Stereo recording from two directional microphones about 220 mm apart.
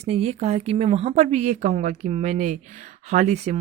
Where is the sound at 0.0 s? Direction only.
30° right (ahead or behind).